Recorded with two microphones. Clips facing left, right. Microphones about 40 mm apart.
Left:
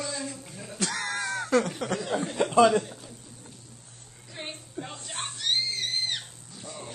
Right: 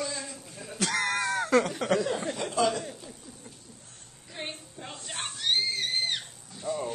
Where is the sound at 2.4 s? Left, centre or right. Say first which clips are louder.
Left 9 dB; left.